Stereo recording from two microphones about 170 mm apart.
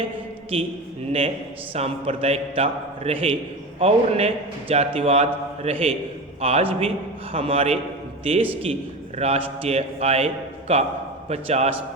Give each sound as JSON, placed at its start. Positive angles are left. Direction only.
{"t": 1.7, "sound": "a man's voice", "side_deg": -35}